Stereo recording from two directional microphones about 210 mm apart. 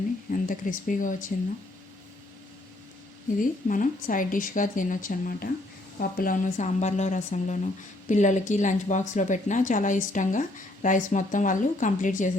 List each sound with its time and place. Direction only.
0.3 s a woman's voice: 40° left (ahead or behind)
3.4 s a woman's voice: 40° left (ahead or behind)